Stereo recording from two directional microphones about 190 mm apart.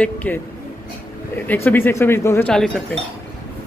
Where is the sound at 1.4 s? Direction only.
10° left (ahead or behind).